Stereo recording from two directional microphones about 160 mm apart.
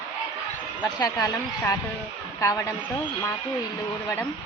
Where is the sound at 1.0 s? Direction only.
25° left (ahead or behind).